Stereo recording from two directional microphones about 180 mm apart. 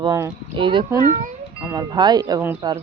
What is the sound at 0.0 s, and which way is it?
Speech, 20° right (ahead or behind).